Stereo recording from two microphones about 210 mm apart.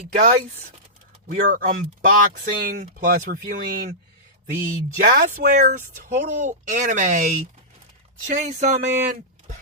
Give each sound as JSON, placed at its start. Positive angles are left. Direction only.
{"t": 1.3, "sound": "speech", "side_deg": -40}